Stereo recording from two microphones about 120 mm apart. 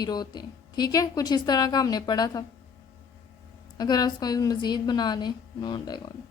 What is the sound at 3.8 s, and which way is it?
A woman's voice, 35° left (ahead or behind).